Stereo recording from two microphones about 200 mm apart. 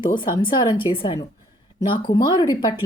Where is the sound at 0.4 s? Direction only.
25° left (ahead or behind).